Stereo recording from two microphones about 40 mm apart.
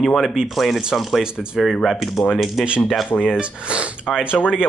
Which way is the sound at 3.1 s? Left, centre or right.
Left.